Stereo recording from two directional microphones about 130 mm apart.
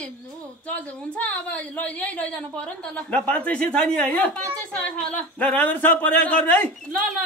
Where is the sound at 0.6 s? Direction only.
10° left (ahead or behind).